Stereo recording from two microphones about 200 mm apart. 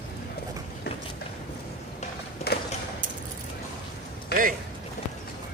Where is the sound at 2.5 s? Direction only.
50° left (ahead or behind).